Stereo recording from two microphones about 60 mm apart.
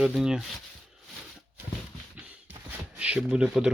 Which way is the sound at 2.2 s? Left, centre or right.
Right.